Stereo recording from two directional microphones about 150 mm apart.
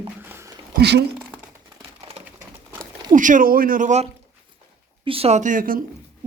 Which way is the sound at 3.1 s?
60° right (ahead or behind).